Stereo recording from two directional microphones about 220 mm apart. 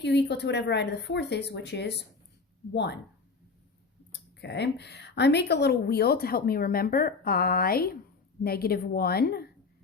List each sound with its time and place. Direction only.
0.0 s speech: 50° left (ahead or behind)
4.4 s speech: 50° left (ahead or behind)